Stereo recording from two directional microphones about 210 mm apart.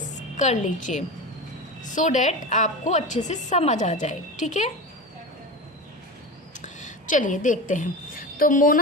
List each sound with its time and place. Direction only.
0.2 s a woman's voice: 35° left (ahead or behind)
6.6 s a woman's voice: 35° left (ahead or behind)